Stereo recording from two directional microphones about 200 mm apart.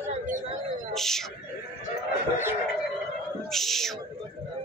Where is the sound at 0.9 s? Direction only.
Centre (ahead or behind).